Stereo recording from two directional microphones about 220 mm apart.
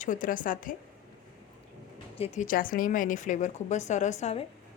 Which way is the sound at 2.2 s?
35° left (ahead or behind).